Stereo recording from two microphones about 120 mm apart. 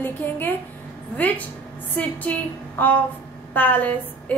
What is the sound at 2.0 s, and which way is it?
A woman's voice, 10° left (ahead or behind).